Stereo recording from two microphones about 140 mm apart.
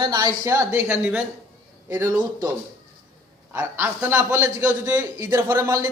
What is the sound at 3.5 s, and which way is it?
A man's voice, 15° right (ahead or behind).